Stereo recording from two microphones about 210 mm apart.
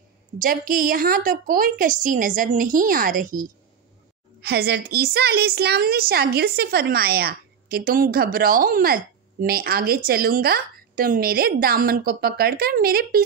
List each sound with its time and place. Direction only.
0.4 s a woman's voice: 40° right (ahead or behind)